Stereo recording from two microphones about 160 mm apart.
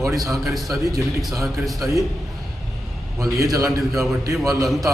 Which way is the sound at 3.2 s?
20° right (ahead or behind).